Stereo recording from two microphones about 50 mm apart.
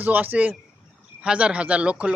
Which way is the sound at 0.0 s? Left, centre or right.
Right.